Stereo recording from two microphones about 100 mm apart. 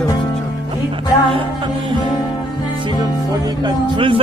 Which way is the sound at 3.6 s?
60° right (ahead or behind).